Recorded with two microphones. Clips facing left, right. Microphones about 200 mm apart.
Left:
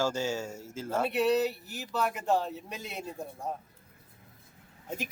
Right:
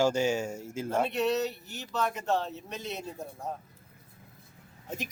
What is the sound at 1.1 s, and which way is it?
Speech, 10° left (ahead or behind).